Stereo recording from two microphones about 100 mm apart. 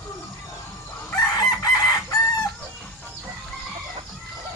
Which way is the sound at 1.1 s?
40° left (ahead or behind).